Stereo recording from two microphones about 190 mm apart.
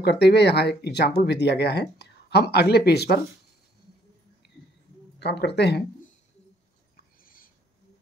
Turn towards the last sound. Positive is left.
turn(degrees=45)  # may be behind; listen again after turning